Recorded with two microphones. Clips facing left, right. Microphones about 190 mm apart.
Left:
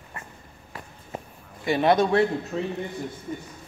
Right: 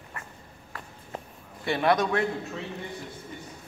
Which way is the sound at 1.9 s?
30° left (ahead or behind).